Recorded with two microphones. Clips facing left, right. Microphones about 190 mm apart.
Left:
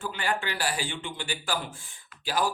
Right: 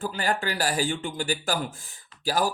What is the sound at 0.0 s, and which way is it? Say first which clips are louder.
Speech: right 3 dB; 40° right (ahead or behind).